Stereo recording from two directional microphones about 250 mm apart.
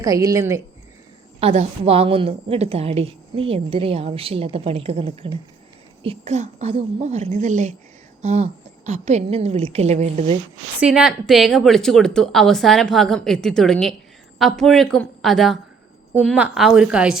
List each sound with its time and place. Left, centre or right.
0.0 s speech: centre
1.4 s a woman's voice: right
10.8 s a woman's voice: centre